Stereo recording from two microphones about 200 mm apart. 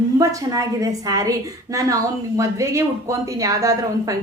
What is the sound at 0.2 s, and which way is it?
A woman's voice, 15° right (ahead or behind).